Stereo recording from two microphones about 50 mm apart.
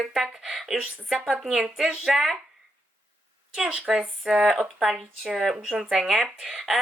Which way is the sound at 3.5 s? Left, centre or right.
Centre.